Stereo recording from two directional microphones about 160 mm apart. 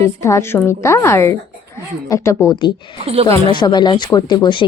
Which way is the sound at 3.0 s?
40° right (ahead or behind).